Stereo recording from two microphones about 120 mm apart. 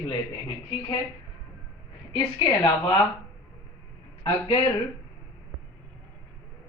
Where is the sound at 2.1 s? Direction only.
45° left (ahead or behind).